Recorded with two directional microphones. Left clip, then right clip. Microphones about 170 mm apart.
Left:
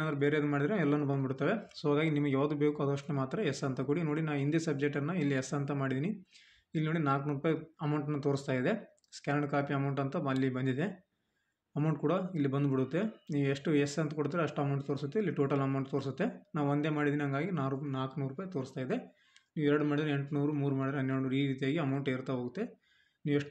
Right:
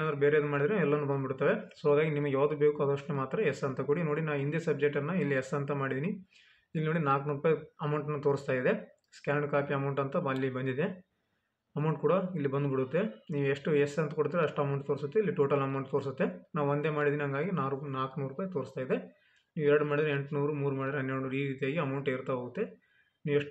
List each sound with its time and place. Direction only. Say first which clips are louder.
0.0 s a man's voice: right 4 dB; 35° left (ahead or behind)